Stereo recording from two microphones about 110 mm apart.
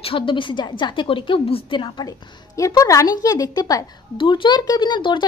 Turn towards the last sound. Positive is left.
turn(degrees=45)  # may be behind; listen again after turning